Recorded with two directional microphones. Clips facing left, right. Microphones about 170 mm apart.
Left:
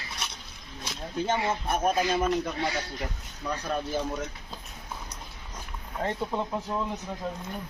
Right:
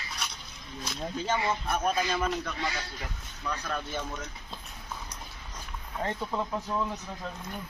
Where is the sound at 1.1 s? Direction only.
55° left (ahead or behind).